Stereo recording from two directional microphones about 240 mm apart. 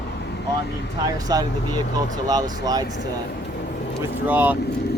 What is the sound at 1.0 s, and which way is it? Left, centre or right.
Speech, centre.